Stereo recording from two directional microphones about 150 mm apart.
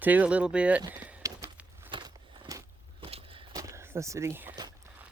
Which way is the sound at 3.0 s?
40° right (ahead or behind).